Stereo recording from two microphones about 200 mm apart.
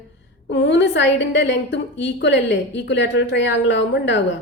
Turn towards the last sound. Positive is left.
turn(degrees=65)  # may be behind; listen again after turning